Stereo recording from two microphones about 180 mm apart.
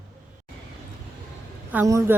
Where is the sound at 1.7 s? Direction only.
15° right (ahead or behind).